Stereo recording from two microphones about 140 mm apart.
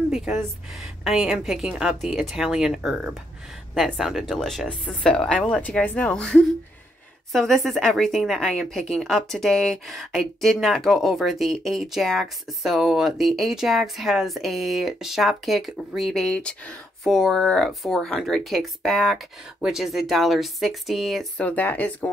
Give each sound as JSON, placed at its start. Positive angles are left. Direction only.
{"t": 0.1, "sound": "speech", "side_deg": 0}